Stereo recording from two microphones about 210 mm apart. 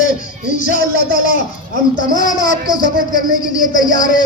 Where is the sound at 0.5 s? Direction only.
40° left (ahead or behind).